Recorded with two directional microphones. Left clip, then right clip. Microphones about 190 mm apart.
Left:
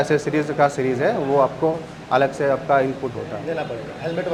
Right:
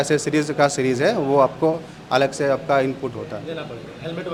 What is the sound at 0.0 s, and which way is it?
Speech, 30° right (ahead or behind).